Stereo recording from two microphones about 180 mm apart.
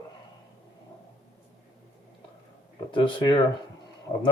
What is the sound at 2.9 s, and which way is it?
Speech, 25° left (ahead or behind).